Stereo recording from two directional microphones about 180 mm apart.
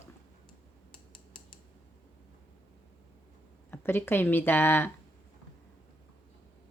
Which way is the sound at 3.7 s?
10° left (ahead or behind).